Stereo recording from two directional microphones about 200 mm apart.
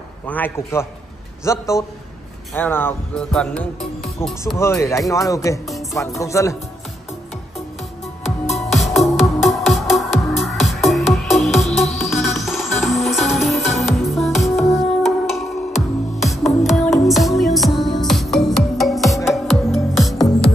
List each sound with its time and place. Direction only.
0.3 s music: 10° left (ahead or behind)
8.5 s music: centre (ahead or behind)